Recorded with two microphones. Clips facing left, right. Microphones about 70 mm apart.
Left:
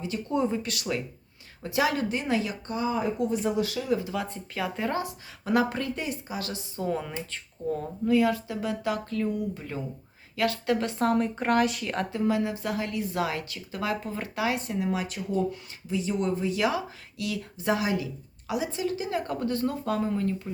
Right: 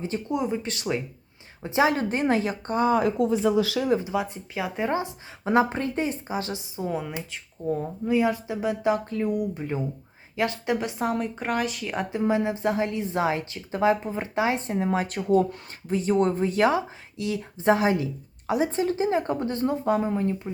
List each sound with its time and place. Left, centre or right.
0.3 s speech: centre
0.6 s speech: right
2.0 s a woman's voice: right
4.0 s speech: centre
6.7 s speech: centre
8.1 s speech: right; by 12.0 s centre
12.1 s speech: right